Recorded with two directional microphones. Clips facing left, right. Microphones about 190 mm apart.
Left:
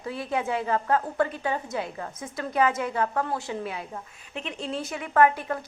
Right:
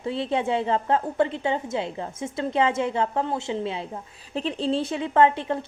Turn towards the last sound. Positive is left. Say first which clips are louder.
# right 2 dB
turn(degrees=-25)  # may be behind; listen again after turning